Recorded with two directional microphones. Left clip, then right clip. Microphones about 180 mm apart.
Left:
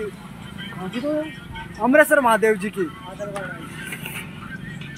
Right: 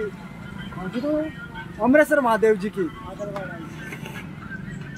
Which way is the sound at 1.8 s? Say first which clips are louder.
Left 2 dB; 15° left (ahead or behind).